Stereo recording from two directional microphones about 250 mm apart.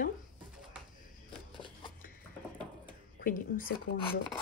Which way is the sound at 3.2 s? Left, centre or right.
Left.